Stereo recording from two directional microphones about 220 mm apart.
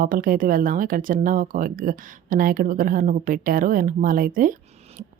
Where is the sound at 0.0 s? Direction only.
40° right (ahead or behind).